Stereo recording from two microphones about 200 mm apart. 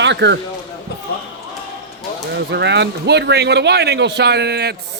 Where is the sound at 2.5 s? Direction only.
60° right (ahead or behind).